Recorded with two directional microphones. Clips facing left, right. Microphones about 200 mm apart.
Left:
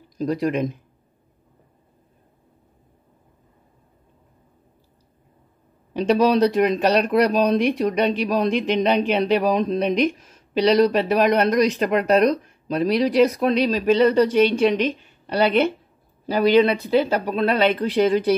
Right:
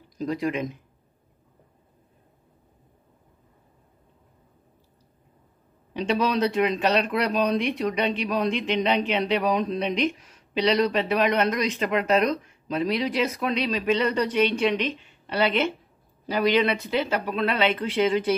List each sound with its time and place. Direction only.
0.2 s speech: 40° left (ahead or behind)
5.9 s speech: 40° left (ahead or behind)